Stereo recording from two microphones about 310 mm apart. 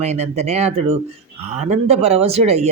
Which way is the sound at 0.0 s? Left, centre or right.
Right.